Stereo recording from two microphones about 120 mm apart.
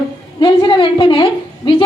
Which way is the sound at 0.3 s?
40° left (ahead or behind).